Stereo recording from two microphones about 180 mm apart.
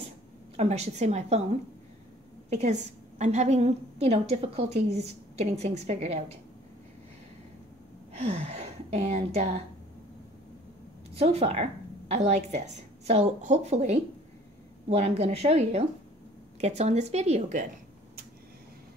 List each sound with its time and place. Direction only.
0.6 s a woman's voice: 35° right (ahead or behind)
8.2 s speech: 35° right (ahead or behind)
11.1 s a woman's voice: 35° right (ahead or behind)